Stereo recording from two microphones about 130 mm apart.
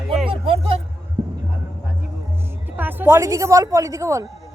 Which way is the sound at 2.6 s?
15° right (ahead or behind).